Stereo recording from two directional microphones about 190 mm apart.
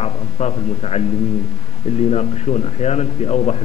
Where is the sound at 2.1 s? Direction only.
35° left (ahead or behind).